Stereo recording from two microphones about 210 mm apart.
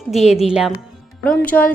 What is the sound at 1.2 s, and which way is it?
Speech, 5° left (ahead or behind).